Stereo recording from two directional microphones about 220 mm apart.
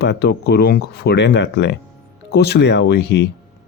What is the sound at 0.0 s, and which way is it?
Speech, 50° left (ahead or behind).